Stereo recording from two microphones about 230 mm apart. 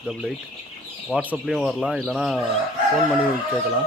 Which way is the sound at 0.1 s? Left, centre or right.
Centre.